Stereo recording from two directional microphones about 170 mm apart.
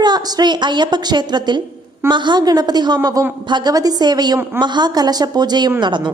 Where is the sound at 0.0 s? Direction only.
25° right (ahead or behind).